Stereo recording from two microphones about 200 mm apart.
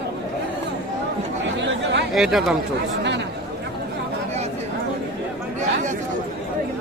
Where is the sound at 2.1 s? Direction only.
Centre (ahead or behind).